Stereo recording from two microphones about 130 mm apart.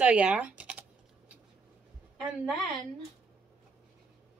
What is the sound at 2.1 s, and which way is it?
Speech, 5° right (ahead or behind).